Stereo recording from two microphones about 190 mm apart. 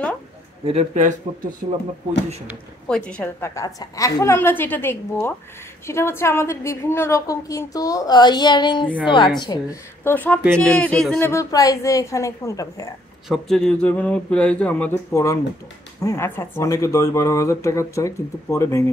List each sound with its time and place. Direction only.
0.7 s speech: 35° right (ahead or behind)
2.9 s a woman's voice: 5° left (ahead or behind); by 9.8 s 25° left (ahead or behind)
10.0 s a woman's voice: 10° left (ahead or behind)
13.3 s a woman's voice: 5° left (ahead or behind)